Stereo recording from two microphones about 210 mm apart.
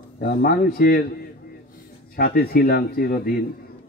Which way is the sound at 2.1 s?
45° left (ahead or behind).